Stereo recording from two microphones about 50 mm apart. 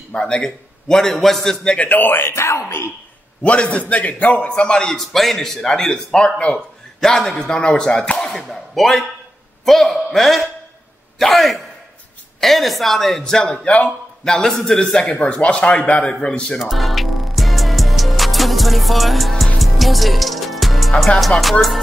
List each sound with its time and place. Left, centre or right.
0.2 s speech: centre
1.8 s speech: left
3.4 s speech: left
4.5 s speech: centre
5.0 s speech: centre
7.0 s a man's voice: centre
15.1 s speech: left
16.7 s music: centre
21.2 s a man's voice: centre